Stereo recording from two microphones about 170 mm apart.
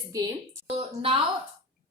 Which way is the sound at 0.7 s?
35° right (ahead or behind).